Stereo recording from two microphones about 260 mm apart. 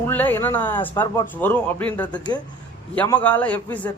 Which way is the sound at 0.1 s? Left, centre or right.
Centre.